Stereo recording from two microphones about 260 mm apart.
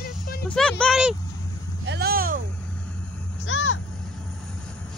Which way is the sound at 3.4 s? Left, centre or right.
Left.